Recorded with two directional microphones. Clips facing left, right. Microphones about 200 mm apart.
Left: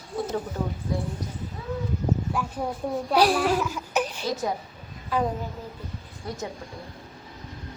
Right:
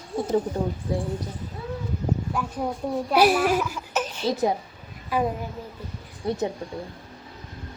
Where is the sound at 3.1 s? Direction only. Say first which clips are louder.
Right 2 dB; 10° right (ahead or behind).